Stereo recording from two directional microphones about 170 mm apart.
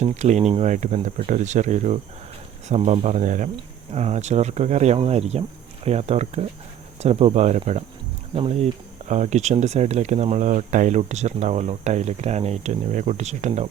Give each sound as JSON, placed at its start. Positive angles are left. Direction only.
{"t": 0.0, "sound": "speech", "side_deg": -45}